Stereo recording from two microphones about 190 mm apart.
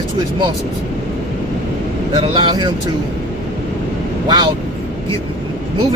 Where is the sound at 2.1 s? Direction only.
25° right (ahead or behind).